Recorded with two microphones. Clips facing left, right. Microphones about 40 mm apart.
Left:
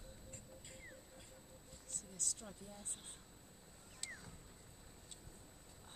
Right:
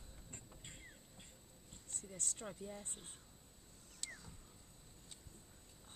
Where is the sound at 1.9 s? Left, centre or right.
Right.